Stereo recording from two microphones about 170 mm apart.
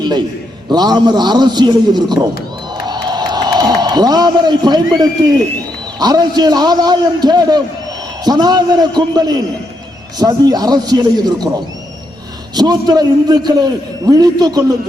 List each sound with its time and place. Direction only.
0.7 s a man's voice: 25° right (ahead or behind)
2.8 s a sound: 25° right (ahead or behind)
5.2 s a man's voice: 25° right (ahead or behind)
12.5 s a man's voice: 25° right (ahead or behind)